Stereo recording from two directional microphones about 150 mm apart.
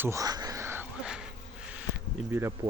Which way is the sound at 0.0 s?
20° right (ahead or behind).